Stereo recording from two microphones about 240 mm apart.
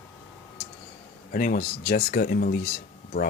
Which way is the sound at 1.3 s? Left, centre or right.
Left.